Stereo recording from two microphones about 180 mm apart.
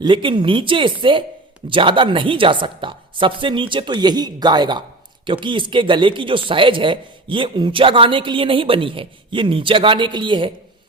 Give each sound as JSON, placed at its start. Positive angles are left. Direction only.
{"t": 0.0, "sound": "speech", "side_deg": -25}